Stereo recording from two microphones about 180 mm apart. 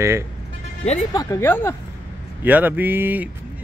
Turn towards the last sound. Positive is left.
turn(degrees=-10)  # may be behind; listen again after turning